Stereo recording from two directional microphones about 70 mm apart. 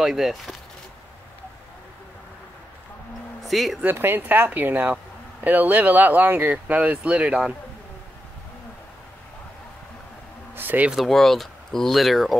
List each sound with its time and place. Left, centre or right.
0.0 s speech: centre
3.4 s speech: centre
3.8 s speech: right; by 7.5 s centre
10.5 s a sound: right
11.1 s speech: centre